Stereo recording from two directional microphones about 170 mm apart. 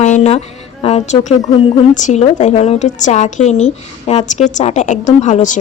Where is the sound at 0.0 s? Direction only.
45° left (ahead or behind).